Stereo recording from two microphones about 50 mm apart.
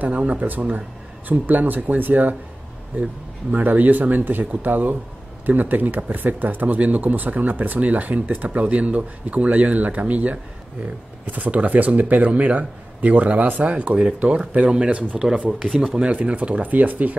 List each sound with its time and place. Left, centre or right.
0.0 s speech: right